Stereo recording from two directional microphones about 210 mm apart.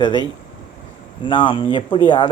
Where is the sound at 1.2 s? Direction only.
20° left (ahead or behind).